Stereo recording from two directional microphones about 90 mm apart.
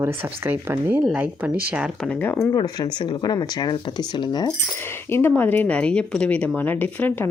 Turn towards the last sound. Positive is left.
turn(degrees=25)  # may be behind; listen again after turning